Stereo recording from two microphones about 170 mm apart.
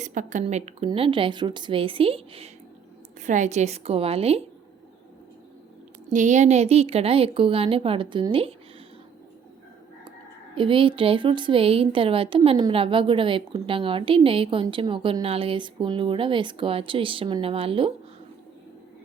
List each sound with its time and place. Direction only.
0.0 s a woman's voice: 50° right (ahead or behind)
3.2 s speech: 45° right (ahead or behind)
6.1 s speech: 45° right (ahead or behind)
10.5 s speech: 30° right (ahead or behind)